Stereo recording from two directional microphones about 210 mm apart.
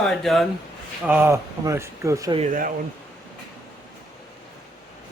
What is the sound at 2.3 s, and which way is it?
Speech, 35° right (ahead or behind).